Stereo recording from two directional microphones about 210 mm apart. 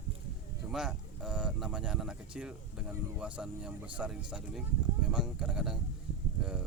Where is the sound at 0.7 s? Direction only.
Centre (ahead or behind).